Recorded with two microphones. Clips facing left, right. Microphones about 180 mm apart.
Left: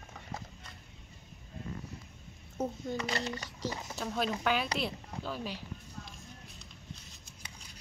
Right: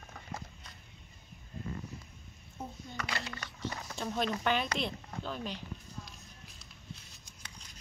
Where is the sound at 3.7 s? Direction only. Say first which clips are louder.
Left 2 dB; 20° left (ahead or behind).